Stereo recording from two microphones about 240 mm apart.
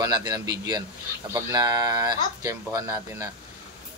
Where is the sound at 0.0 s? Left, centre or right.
Centre.